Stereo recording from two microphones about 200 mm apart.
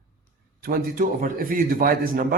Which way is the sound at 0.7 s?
45° right (ahead or behind).